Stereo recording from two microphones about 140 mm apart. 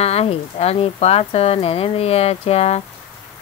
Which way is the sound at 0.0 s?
45° left (ahead or behind).